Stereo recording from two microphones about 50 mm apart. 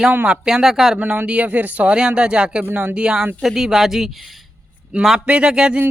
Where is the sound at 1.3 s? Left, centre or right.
Right.